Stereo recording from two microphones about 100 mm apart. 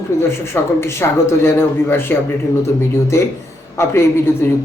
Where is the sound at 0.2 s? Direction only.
25° left (ahead or behind).